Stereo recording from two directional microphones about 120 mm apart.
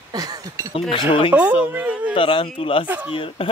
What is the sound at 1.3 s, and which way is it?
Speech, 15° right (ahead or behind).